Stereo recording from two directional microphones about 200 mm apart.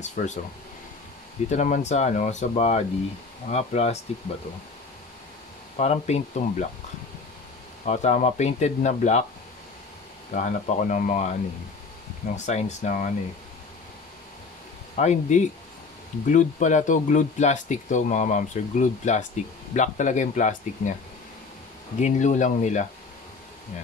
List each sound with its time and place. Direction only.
0.0 s speech: 35° left (ahead or behind)
1.5 s speech: 35° left (ahead or behind)
5.8 s speech: 35° left (ahead or behind)
7.8 s speech: 35° left (ahead or behind)
10.3 s speech: 40° left (ahead or behind)
12.4 s speech: 35° left (ahead or behind)
15.0 s speech: 35° left (ahead or behind)
22.0 s speech: 40° left (ahead or behind)